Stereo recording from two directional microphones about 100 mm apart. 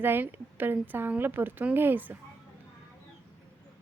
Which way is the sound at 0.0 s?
20° right (ahead or behind).